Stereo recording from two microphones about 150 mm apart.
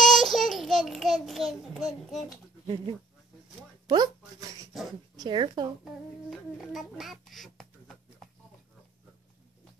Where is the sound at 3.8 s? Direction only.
25° right (ahead or behind).